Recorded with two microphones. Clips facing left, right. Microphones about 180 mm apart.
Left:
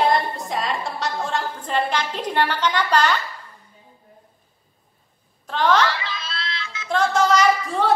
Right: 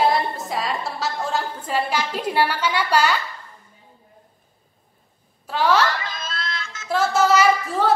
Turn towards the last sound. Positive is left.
turn(degrees=0)  # may be behind; listen again after turning